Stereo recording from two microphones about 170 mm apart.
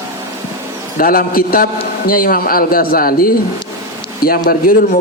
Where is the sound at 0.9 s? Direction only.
55° left (ahead or behind).